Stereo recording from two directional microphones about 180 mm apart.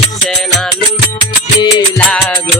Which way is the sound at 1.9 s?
5° left (ahead or behind).